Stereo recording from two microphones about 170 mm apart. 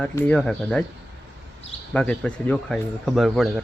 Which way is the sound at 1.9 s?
5° left (ahead or behind).